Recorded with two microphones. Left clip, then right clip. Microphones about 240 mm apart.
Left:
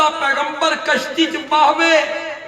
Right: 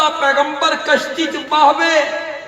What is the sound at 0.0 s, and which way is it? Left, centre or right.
A man's voice, left.